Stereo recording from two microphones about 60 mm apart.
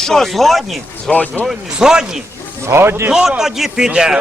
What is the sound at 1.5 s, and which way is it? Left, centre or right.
Speech, centre.